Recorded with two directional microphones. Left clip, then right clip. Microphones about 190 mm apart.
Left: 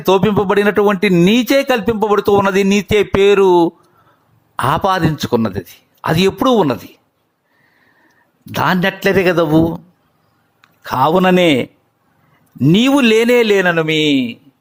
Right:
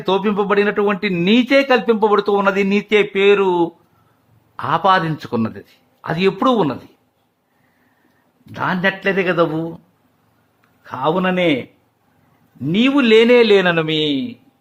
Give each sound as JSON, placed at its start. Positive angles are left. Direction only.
{"t": 0.0, "sound": "speech", "side_deg": 40}
{"t": 4.5, "sound": "speech", "side_deg": 35}
{"t": 8.5, "sound": "a man's voice", "side_deg": 45}